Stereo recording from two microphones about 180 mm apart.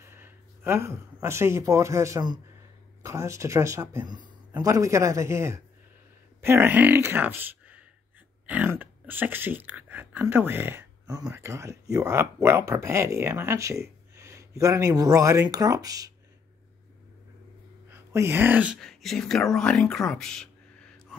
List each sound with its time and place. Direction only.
0.0 s speech: 15° right (ahead or behind)
17.8 s speech: 15° right (ahead or behind); by 20.4 s 5° left (ahead or behind)